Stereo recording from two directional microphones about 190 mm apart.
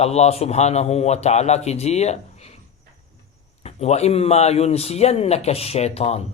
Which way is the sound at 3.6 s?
35° left (ahead or behind).